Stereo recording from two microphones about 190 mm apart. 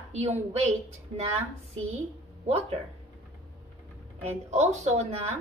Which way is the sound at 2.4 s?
35° right (ahead or behind).